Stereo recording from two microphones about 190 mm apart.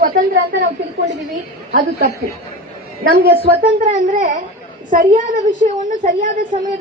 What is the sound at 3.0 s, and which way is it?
Speech, 50° right (ahead or behind).